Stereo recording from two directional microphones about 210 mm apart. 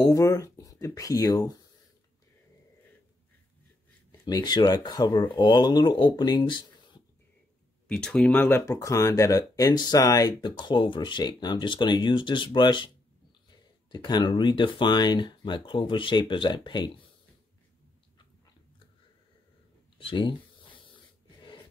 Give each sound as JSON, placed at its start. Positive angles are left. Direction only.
{"t": 0.0, "sound": "speech", "side_deg": 15}
{"t": 4.3, "sound": "speech", "side_deg": 20}
{"t": 7.9, "sound": "speech", "side_deg": 5}
{"t": 20.0, "sound": "speech", "side_deg": 25}